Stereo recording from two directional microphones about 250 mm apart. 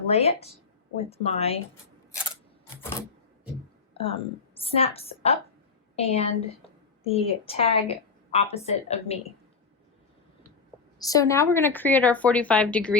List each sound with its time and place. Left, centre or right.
0.1 s a woman's voice: left
3.9 s a woman's voice: left
11.0 s a woman's voice: centre